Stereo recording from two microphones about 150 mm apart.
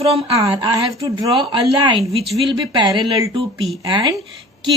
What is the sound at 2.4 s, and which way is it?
Speech, 30° right (ahead or behind).